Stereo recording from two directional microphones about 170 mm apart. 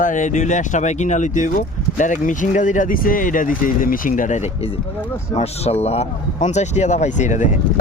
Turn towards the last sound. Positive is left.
turn(degrees=45)  # may be behind; listen again after turning